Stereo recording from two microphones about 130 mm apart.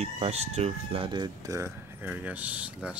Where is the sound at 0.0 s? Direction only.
55° right (ahead or behind); by 1.3 s 40° right (ahead or behind).